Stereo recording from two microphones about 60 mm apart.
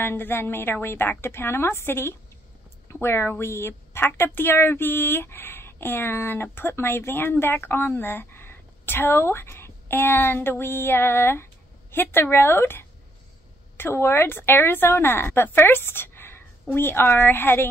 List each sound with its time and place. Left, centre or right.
0.0 s a woman's voice: left